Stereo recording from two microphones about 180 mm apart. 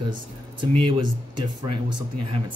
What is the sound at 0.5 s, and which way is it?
Speech, 30° right (ahead or behind).